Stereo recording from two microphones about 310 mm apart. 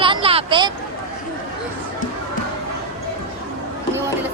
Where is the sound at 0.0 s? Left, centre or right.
Centre.